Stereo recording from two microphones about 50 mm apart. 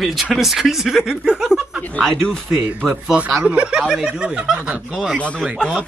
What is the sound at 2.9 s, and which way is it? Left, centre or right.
Speech, right.